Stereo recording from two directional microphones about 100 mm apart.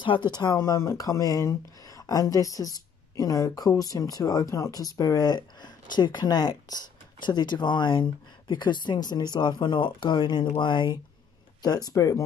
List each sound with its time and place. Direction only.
0.0 s speech: 55° left (ahead or behind)
0.6 s speech: 30° left (ahead or behind); by 11.0 s 50° left (ahead or behind)
11.6 s speech: 40° left (ahead or behind)